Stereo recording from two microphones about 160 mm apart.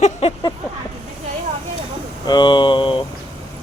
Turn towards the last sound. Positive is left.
turn(degrees=30)  # may be behind; listen again after turning